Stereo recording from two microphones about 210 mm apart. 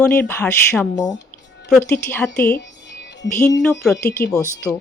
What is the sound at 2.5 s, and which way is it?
Music, 55° left (ahead or behind).